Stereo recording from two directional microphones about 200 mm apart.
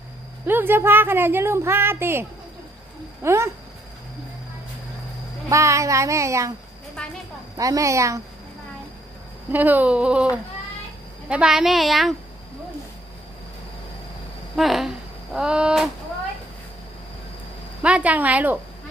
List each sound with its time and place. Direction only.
0.4 s a woman's voice: 10° right (ahead or behind)
3.2 s a woman's voice: 15° right (ahead or behind)
5.5 s a woman's voice: 15° right (ahead or behind)
7.5 s a woman's voice: 15° right (ahead or behind)
9.5 s a woman's voice: 10° right (ahead or behind)
14.5 s speech: centre (ahead or behind)
17.8 s a woman's voice: 5° right (ahead or behind)